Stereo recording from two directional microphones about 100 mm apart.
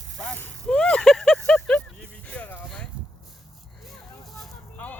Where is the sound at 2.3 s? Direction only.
15° left (ahead or behind).